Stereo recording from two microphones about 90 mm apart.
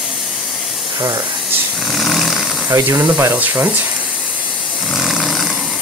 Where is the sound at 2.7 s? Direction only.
35° right (ahead or behind).